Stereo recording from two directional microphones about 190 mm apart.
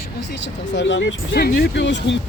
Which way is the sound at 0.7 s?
70° left (ahead or behind).